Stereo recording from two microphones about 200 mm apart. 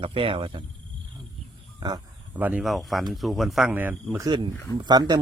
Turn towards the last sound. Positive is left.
turn(degrees=-20)  # may be behind; listen again after turning